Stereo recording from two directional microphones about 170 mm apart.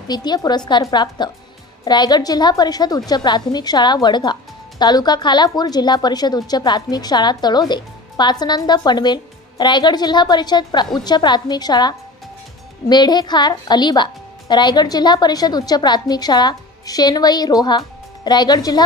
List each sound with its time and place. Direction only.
0.1 s a woman's voice: 25° left (ahead or behind)